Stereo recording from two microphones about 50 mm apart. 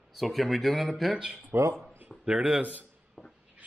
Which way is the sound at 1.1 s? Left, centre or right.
Centre.